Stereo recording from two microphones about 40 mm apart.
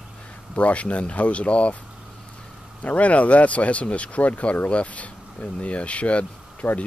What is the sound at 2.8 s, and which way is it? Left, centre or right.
Speech, left.